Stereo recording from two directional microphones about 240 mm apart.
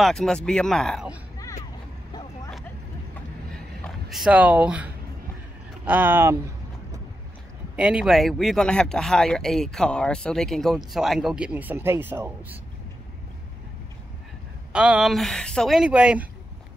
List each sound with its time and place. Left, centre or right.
0.0 s speech: centre
3.8 s speech: centre
7.7 s speech: centre
14.7 s speech: centre